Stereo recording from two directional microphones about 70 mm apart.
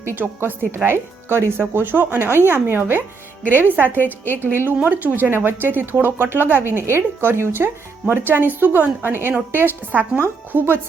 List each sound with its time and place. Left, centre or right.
0.2 s speech: right
3.9 s a woman's voice: left
4.8 s a woman's voice: right